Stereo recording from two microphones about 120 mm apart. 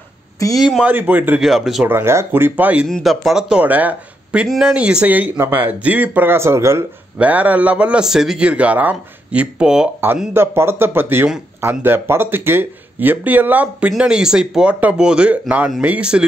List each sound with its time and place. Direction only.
0.6 s speech: 5° right (ahead or behind)
1.4 s speech: centre (ahead or behind)
1.9 s speech: 20° right (ahead or behind)
2.9 s speech: centre (ahead or behind)
10.3 s speech: 20° right (ahead or behind)